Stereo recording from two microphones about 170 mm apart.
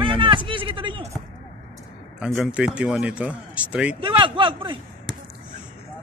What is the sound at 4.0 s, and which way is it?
Speech, 30° right (ahead or behind).